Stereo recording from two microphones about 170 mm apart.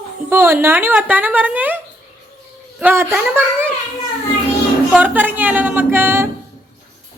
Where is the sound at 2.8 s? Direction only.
15° right (ahead or behind).